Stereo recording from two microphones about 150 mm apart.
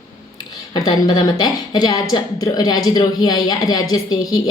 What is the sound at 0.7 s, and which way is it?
A woman's voice, 30° left (ahead or behind).